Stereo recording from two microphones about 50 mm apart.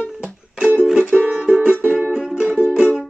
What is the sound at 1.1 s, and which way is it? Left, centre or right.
Music, right.